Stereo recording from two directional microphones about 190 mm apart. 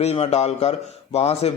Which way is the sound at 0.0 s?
35° left (ahead or behind).